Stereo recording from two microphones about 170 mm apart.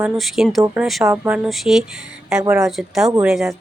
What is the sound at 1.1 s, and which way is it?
Speech, 10° right (ahead or behind).